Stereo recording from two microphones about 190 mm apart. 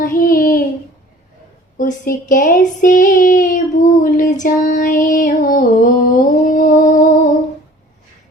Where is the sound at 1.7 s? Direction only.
45° left (ahead or behind).